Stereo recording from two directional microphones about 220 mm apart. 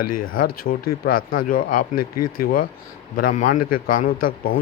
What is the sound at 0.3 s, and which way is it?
Speech, 40° left (ahead or behind).